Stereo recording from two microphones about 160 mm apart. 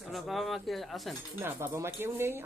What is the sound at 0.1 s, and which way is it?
Speech, centre (ahead or behind).